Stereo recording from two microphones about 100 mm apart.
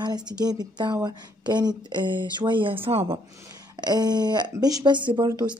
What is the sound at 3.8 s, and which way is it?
Speech, 45° right (ahead or behind).